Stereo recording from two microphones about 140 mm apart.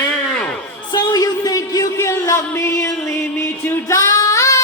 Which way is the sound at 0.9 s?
25° left (ahead or behind).